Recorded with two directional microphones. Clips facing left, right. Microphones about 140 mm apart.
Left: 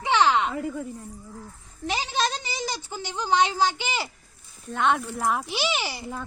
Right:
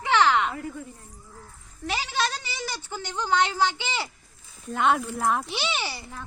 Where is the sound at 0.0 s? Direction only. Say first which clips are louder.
Even; 15° left (ahead or behind).